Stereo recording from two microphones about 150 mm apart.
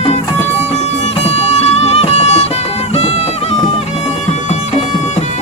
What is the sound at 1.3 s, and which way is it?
Music, 45° left (ahead or behind).